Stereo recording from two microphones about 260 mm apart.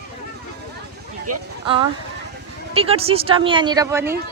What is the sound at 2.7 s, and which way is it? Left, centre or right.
A woman's voice, right.